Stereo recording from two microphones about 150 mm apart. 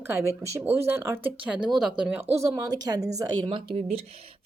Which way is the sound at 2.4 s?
25° right (ahead or behind).